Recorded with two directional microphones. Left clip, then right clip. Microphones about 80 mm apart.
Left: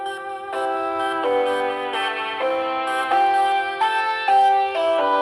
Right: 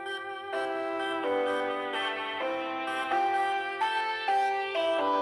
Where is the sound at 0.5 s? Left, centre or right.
Left.